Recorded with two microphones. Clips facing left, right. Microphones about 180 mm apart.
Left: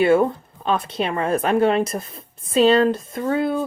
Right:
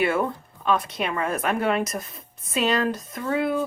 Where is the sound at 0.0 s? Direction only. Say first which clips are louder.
Left 7 dB; 30° left (ahead or behind).